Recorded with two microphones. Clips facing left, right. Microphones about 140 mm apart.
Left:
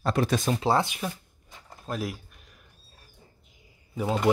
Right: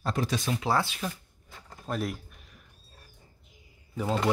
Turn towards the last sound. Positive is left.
turn(degrees=10)  # may be behind; listen again after turning